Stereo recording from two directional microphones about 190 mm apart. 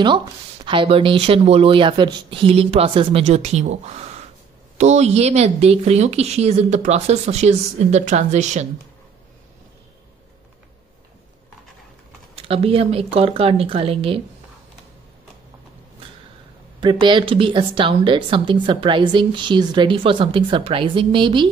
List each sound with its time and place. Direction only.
0.0 s a woman's voice: 25° right (ahead or behind)
12.4 s a woman's voice: 30° right (ahead or behind)
16.8 s a woman's voice: 25° right (ahead or behind)